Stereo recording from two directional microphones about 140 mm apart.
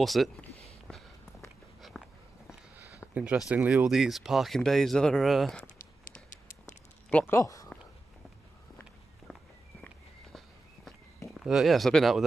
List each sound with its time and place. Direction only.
0.0 s speech: centre (ahead or behind)
0.7 s a sound: centre (ahead or behind)
3.2 s speech: 5° right (ahead or behind)
6.3 s a sound: 70° left (ahead or behind)
7.1 s speech: 10° left (ahead or behind)
7.3 s speech: 25° left (ahead or behind)
9.3 s walk: centre (ahead or behind)
11.2 s speech: centre (ahead or behind)